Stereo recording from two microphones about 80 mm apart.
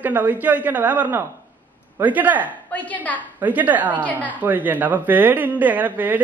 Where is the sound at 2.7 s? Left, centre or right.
Centre.